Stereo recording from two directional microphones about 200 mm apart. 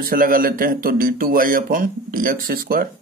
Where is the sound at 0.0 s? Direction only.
45° right (ahead or behind).